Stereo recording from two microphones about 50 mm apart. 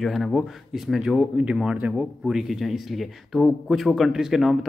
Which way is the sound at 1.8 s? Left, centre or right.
Right.